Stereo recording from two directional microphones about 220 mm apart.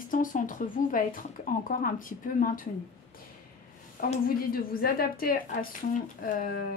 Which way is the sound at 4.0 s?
40° left (ahead or behind).